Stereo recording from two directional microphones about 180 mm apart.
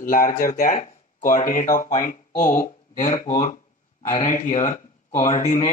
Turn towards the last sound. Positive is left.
turn(degrees=40)  # may be behind; listen again after turning